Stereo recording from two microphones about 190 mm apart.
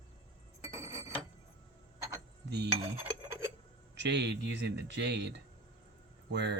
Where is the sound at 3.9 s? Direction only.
65° right (ahead or behind).